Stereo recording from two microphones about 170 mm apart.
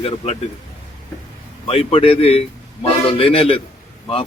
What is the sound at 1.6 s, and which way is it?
Speech, 35° left (ahead or behind).